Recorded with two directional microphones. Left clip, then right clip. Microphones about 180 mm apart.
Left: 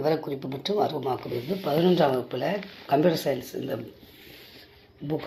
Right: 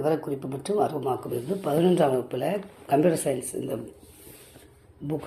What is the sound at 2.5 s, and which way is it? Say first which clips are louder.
A woman's voice: even; 5° right (ahead or behind).